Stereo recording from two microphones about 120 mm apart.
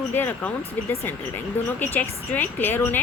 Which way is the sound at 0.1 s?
15° left (ahead or behind).